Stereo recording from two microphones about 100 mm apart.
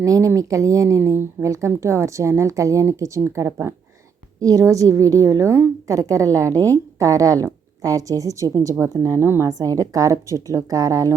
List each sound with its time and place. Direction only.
0.0 s a woman's voice: 30° right (ahead or behind)